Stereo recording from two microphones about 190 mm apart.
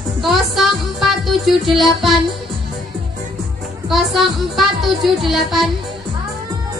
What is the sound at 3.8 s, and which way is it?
Speech, centre (ahead or behind).